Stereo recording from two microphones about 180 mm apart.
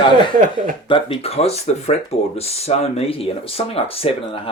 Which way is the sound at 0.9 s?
30° left (ahead or behind).